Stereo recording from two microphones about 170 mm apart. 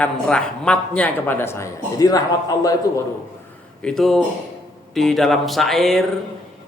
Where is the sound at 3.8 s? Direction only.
5° left (ahead or behind).